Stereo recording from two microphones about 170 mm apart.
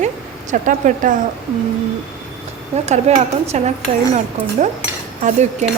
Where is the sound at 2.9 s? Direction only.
40° right (ahead or behind).